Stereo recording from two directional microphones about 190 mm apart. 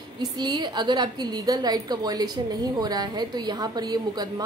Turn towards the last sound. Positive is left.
turn(degrees=-20)  # may be behind; listen again after turning